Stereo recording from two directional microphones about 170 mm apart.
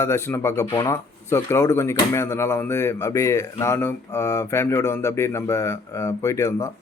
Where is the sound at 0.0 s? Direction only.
15° left (ahead or behind).